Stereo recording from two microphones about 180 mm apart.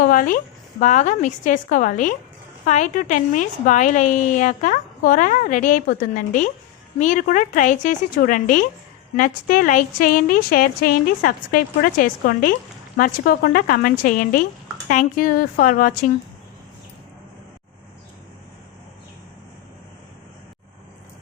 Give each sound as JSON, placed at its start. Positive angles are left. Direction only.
{"t": 0.0, "sound": "a woman's voice", "side_deg": 50}